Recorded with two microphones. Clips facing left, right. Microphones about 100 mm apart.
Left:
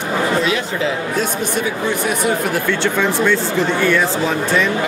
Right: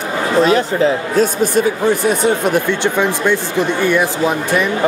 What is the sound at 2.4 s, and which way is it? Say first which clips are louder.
Speech: right 3 dB; 20° right (ahead or behind).